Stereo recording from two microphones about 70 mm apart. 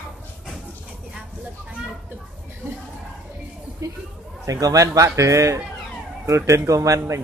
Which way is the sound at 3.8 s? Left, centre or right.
Right.